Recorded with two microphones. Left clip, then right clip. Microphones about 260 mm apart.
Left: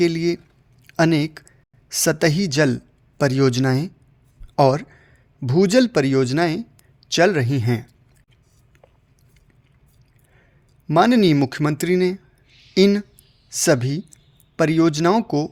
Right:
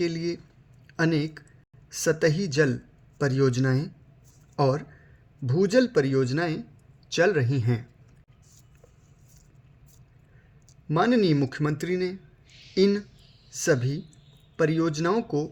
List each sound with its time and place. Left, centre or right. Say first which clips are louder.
0.0 s speech: left 9 dB; left
10.8 s speech: left 7 dB; left